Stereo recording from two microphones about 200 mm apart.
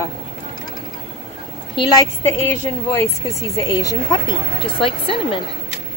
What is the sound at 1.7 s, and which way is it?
A woman's voice, 15° left (ahead or behind).